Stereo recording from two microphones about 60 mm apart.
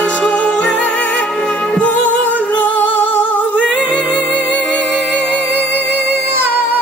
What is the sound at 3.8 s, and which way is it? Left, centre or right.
Music, right.